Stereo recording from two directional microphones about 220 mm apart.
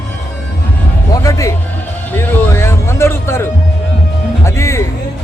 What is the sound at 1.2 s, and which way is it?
Speech, 15° left (ahead or behind).